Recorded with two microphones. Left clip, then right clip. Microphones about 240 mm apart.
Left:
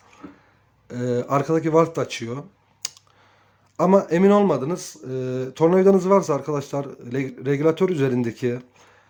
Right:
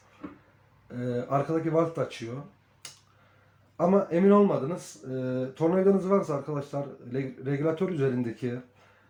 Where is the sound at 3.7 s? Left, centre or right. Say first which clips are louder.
Left 7 dB; left.